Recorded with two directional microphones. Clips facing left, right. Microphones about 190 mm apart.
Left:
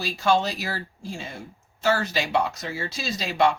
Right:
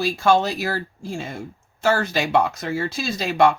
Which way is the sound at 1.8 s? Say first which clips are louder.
Right 3 dB; 50° right (ahead or behind).